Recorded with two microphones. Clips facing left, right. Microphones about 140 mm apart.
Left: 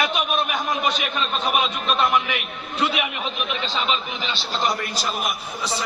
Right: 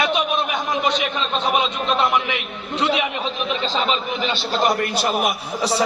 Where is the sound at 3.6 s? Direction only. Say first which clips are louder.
Right 3 dB; 40° right (ahead or behind).